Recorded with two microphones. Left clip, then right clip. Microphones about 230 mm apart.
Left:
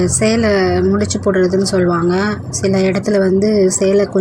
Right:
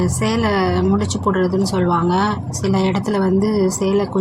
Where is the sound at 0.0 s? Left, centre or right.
Centre.